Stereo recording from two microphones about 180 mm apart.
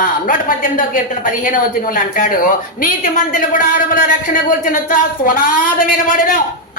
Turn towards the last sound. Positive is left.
turn(degrees=50)  # may be behind; listen again after turning